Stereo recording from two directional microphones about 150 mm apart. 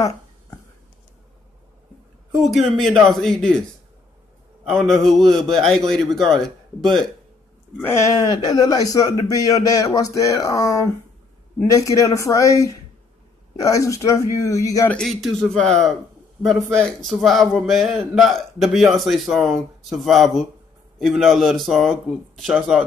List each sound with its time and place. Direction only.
2.3 s speech: centre (ahead or behind)
4.6 s speech: centre (ahead or behind)
7.8 s speech: 20° left (ahead or behind)
14.9 s speech: 5° left (ahead or behind)